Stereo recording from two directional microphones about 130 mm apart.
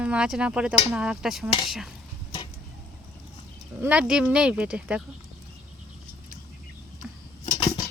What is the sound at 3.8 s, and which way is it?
Speech, 10° right (ahead or behind).